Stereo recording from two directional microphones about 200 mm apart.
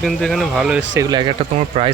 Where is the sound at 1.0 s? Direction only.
20° right (ahead or behind).